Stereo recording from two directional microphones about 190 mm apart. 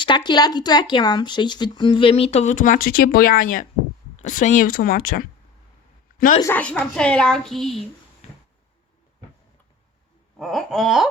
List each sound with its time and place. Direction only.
0.3 s a woman's voice: 20° left (ahead or behind); by 6.4 s 45° left (ahead or behind)
6.4 s a woman's voice: 10° left (ahead or behind)
8.2 s a sound: 35° left (ahead or behind)
10.3 s a woman's voice: centre (ahead or behind)